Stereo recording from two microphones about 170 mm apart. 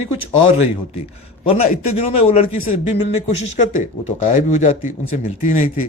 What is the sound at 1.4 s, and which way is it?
Speech, 35° left (ahead or behind).